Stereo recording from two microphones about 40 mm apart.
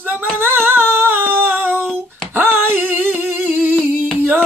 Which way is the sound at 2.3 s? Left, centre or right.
Right.